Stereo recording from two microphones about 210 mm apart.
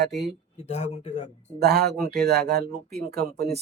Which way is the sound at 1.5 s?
50° right (ahead or behind).